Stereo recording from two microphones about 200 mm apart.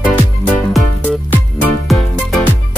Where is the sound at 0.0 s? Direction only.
5° left (ahead or behind).